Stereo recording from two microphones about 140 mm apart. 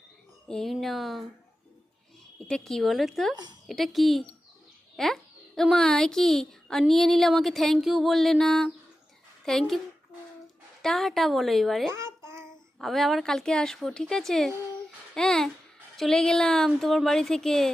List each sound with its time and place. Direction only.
0.4 s a woman's voice: 5° left (ahead or behind)
2.5 s a woman's voice: 5° left (ahead or behind)
3.3 s speech: 30° right (ahead or behind)
3.7 s a woman's voice: centre (ahead or behind)
10.8 s a woman's voice: centre (ahead or behind)
11.9 s babbling: 20° right (ahead or behind)
12.8 s a woman's voice: centre (ahead or behind)